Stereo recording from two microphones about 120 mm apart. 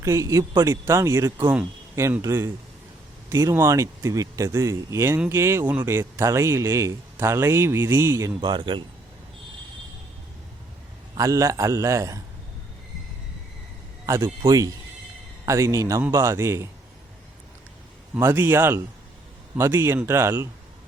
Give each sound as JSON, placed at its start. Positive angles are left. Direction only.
{"t": 0.0, "sound": "a man's voice", "side_deg": -25}
{"t": 8.4, "sound": "speech", "side_deg": -40}
{"t": 11.2, "sound": "a man's voice", "side_deg": -25}
{"t": 14.4, "sound": "a man's voice", "side_deg": -30}
{"t": 18.2, "sound": "a man's voice", "side_deg": -20}